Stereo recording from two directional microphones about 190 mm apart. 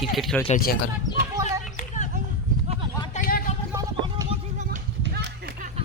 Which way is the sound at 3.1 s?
50° left (ahead or behind).